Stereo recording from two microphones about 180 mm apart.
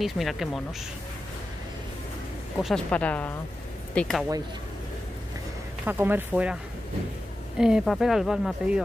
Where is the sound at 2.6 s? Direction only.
5° left (ahead or behind).